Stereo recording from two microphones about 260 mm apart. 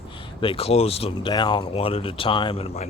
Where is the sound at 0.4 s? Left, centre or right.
Left.